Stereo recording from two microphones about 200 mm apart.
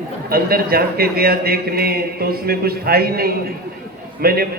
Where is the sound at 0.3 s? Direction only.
50° right (ahead or behind).